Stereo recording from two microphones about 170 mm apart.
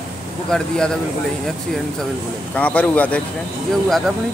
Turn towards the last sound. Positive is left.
turn(degrees=0)  # may be behind; listen again after turning